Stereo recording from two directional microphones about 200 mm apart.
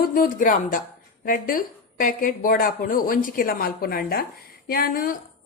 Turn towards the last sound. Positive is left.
turn(degrees=45)  # may be behind; listen again after turning